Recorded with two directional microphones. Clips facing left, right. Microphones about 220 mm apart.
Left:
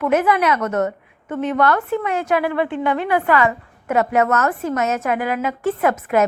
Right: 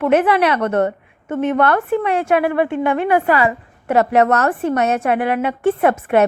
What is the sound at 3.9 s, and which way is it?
A woman's voice, 35° right (ahead or behind).